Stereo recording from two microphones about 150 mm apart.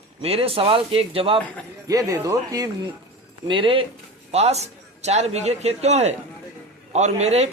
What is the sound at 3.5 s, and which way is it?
A man's voice, 35° right (ahead or behind).